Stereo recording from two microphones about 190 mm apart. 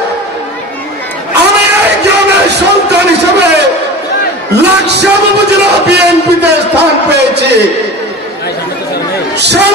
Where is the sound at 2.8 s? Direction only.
60° right (ahead or behind).